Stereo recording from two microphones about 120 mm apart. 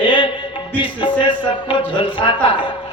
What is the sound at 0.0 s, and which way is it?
Music, 45° left (ahead or behind).